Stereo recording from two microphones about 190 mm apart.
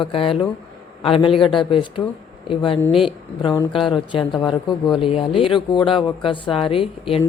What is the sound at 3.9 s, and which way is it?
Speech, 25° left (ahead or behind).